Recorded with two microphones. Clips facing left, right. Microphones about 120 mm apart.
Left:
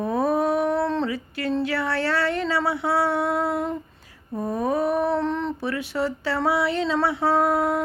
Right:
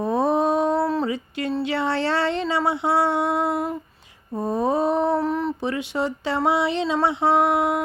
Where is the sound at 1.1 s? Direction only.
20° right (ahead or behind).